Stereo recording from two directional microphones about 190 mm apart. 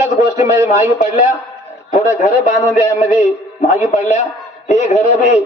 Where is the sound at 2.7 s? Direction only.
35° left (ahead or behind).